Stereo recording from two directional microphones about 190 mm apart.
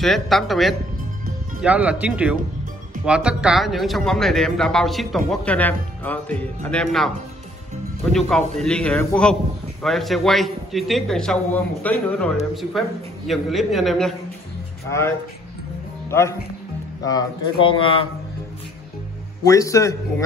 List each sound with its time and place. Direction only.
0.0 s a man's voice: centre (ahead or behind)
8.3 s a man's voice: 5° left (ahead or behind)
13.3 s a man's voice: centre (ahead or behind)
14.9 s a man's voice: 15° left (ahead or behind)
19.4 s a man's voice: 15° left (ahead or behind)